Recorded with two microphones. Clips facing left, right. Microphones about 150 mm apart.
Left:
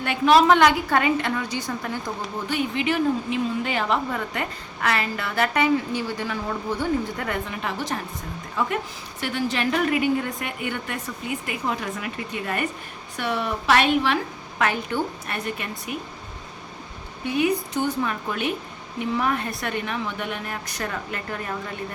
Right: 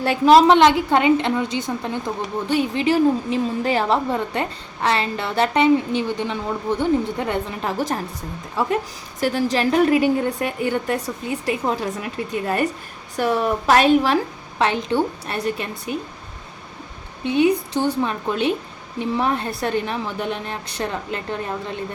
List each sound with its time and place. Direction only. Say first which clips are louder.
0.0 s a woman's voice: right 4 dB; 35° right (ahead or behind)
0.5 s a woman's voice: right 4 dB; 25° right (ahead or behind)
7.6 s a woman's voice: right 5 dB; 45° right (ahead or behind)
8.6 s a woman's voice: right 4 dB; 30° right (ahead or behind)
13.1 s a woman's voice: right 6 dB; 40° right (ahead or behind)
14.6 s a woman's voice: right 5 dB; 25° right (ahead or behind)
17.2 s a woman's voice: right 5 dB; 30° right (ahead or behind)